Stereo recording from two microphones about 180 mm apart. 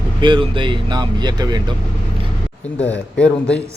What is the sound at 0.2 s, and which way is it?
Speech, 25° right (ahead or behind).